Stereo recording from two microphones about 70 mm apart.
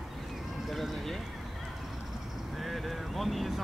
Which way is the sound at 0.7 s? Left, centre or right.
Centre.